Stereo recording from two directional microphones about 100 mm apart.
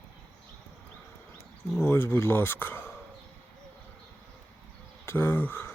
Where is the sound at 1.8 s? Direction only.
25° left (ahead or behind).